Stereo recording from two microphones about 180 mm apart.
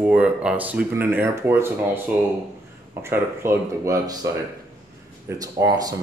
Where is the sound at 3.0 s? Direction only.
15° right (ahead or behind).